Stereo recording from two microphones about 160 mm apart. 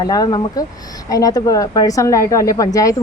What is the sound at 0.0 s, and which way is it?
Speech, 25° left (ahead or behind).